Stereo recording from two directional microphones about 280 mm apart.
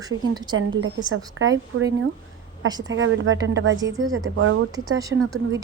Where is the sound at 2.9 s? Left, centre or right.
Right.